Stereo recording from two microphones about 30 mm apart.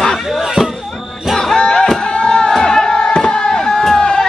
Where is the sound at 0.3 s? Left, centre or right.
Centre.